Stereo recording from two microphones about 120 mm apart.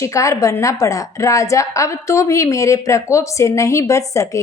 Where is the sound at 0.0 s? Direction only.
25° left (ahead or behind).